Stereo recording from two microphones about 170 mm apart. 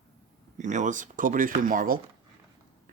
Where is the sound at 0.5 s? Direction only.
45° right (ahead or behind).